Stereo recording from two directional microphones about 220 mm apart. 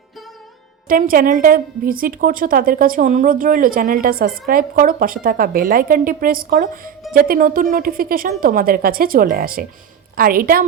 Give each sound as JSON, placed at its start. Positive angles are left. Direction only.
{"t": 0.9, "sound": "a woman's voice", "side_deg": -40}